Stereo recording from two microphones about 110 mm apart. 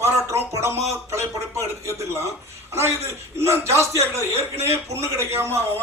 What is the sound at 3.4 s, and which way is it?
A man's voice, 25° right (ahead or behind).